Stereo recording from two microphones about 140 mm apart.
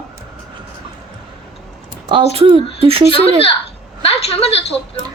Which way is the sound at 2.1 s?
40° right (ahead or behind).